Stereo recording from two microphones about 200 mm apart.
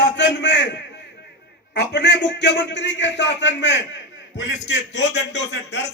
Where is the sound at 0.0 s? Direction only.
60° left (ahead or behind).